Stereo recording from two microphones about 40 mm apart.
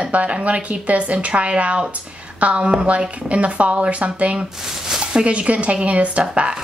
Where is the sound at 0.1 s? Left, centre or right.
Right.